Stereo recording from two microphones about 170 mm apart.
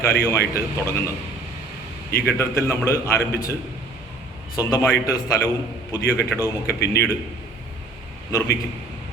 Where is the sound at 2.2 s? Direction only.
15° left (ahead or behind).